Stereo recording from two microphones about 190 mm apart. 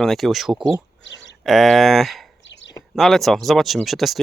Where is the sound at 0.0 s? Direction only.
Centre (ahead or behind).